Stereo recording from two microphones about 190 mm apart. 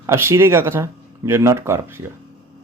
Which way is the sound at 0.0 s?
15° right (ahead or behind).